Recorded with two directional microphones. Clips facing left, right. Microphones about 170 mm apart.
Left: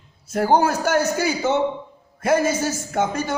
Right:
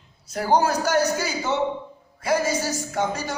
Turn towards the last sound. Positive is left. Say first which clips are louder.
# left 3 dB
turn(degrees=55)  # may be behind; listen again after turning